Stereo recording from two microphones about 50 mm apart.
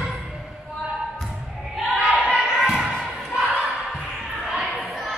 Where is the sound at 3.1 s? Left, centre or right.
Centre.